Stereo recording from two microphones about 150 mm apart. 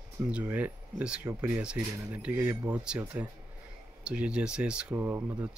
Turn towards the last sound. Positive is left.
turn(degrees=-15)  # may be behind; listen again after turning